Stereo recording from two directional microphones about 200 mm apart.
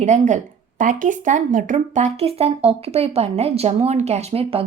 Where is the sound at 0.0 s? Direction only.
35° right (ahead or behind).